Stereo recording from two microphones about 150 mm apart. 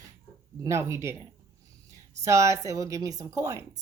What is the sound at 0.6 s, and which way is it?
Speech, 20° right (ahead or behind).